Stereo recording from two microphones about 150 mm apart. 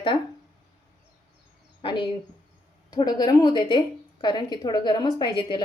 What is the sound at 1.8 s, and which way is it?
A woman's voice, 35° left (ahead or behind).